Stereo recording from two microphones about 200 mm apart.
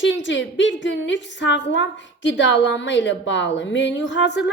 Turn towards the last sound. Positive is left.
turn(degrees=65)  # may be behind; listen again after turning